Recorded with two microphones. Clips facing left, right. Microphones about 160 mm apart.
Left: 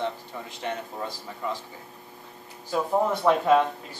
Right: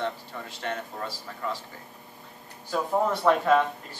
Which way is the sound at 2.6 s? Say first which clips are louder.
Left 1 dB; 5° left (ahead or behind).